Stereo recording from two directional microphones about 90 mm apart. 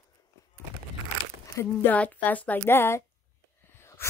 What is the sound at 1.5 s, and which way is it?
Speech, 25° left (ahead or behind).